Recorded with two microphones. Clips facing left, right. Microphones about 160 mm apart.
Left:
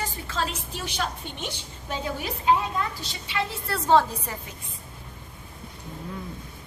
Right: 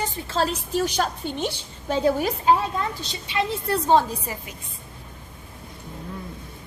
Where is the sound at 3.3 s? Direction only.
20° right (ahead or behind).